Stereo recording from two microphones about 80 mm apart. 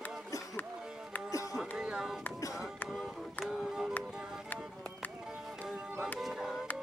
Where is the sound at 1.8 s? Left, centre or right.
Centre.